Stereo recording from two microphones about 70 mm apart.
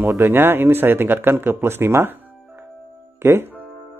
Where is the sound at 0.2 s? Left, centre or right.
Right.